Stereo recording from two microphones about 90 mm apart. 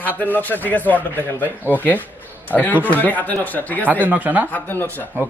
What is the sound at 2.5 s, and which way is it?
A man's voice, 20° left (ahead or behind).